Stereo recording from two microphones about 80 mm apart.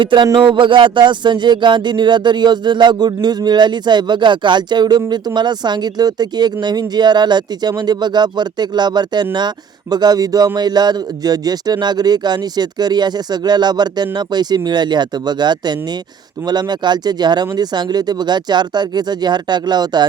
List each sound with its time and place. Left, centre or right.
0.0 s a man's voice: right